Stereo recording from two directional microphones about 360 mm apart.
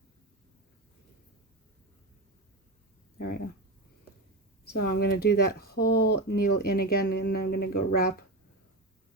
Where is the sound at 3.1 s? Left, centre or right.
Left.